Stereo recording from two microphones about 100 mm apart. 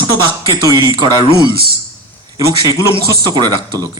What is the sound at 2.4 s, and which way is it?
A man's voice, 35° right (ahead or behind).